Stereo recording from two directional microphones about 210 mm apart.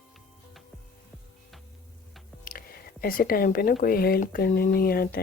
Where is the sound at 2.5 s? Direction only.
45° left (ahead or behind).